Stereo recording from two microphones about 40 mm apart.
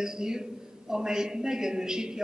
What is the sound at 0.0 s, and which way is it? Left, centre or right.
A man's voice, centre.